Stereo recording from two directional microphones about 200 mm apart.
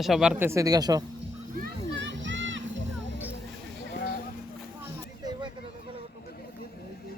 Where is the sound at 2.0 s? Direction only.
65° right (ahead or behind).